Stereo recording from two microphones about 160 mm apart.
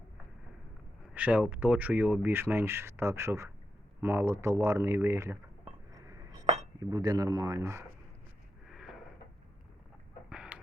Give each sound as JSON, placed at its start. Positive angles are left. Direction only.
{"t": 1.1, "sound": "speech", "side_deg": -10}
{"t": 5.9, "sound": "a sound", "side_deg": -20}
{"t": 6.4, "sound": "cutlery", "side_deg": -45}
{"t": 6.7, "sound": "a man's voice", "side_deg": -25}
{"t": 8.7, "sound": "wheeze", "side_deg": -5}
{"t": 10.2, "sound": "chicken", "side_deg": -5}